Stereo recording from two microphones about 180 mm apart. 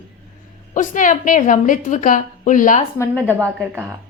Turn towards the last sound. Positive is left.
turn(degrees=-10)  # may be behind; listen again after turning